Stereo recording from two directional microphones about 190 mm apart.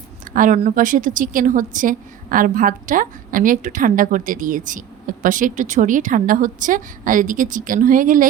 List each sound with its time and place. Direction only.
0.3 s a woman's voice: 40° right (ahead or behind)